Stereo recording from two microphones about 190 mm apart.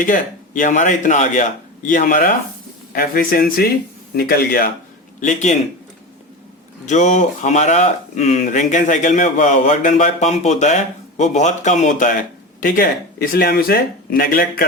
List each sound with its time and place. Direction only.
0.0 s a man's voice: 45° left (ahead or behind)
5.2 s speech: 40° left (ahead or behind)
6.8 s a man's voice: 40° left (ahead or behind)